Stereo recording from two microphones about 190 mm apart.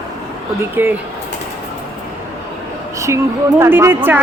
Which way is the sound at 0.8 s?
10° right (ahead or behind).